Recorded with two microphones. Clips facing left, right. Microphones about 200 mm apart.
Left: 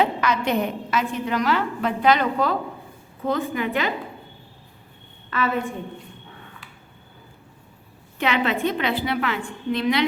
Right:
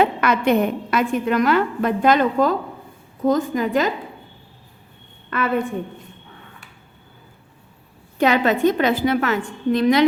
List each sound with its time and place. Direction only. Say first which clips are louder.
0.0 s a woman's voice: right 4 dB; 60° right (ahead or behind); by 3.9 s 40° right (ahead or behind)
8.2 s a woman's voice: right 6 dB; 40° right (ahead or behind)